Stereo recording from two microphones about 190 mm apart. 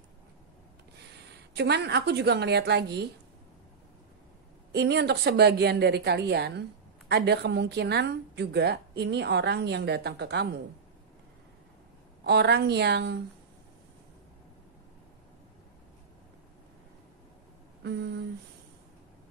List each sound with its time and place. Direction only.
1.6 s a woman's voice: 60° right (ahead or behind)
4.7 s a woman's voice: 60° right (ahead or behind)
12.3 s a woman's voice: 60° right (ahead or behind)
17.8 s a woman's voice: 60° right (ahead or behind)